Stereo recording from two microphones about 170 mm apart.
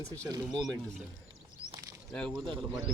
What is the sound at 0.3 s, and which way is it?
Speech, 25° right (ahead or behind).